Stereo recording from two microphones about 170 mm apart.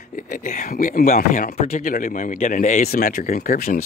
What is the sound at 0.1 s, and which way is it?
Speech, 50° left (ahead or behind).